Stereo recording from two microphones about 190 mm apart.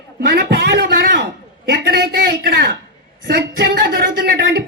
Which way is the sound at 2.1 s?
60° right (ahead or behind).